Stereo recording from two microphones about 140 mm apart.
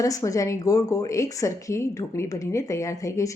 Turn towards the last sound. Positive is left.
turn(degrees=25)  # may be behind; listen again after turning